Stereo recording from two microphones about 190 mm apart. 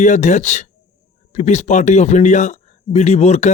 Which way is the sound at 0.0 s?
40° left (ahead or behind).